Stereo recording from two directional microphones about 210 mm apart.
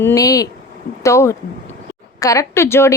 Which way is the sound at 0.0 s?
15° left (ahead or behind).